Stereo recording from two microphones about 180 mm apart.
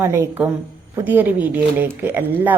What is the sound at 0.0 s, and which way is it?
A woman's voice, 15° right (ahead or behind).